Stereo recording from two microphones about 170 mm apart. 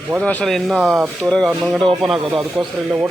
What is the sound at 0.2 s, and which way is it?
Speech, 10° left (ahead or behind).